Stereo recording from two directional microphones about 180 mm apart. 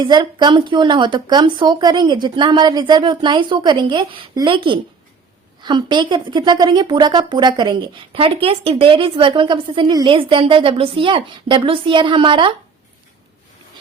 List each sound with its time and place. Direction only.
0.0 s a woman's voice: 25° right (ahead or behind)